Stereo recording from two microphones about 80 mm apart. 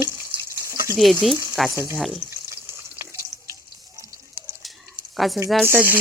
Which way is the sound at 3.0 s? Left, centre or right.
Right.